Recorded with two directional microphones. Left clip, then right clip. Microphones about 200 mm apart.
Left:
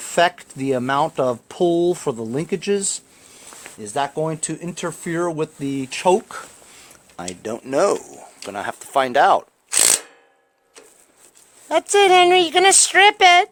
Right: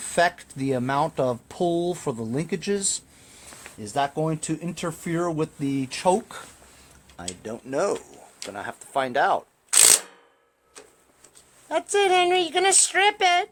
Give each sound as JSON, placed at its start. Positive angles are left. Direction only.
{"t": 0.1, "sound": "speech", "side_deg": 40}
{"t": 7.2, "sound": "a woman's voice", "side_deg": 55}
{"t": 11.7, "sound": "a woman's voice", "side_deg": 55}